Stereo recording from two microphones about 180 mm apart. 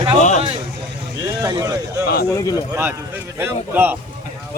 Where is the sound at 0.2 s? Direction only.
40° left (ahead or behind).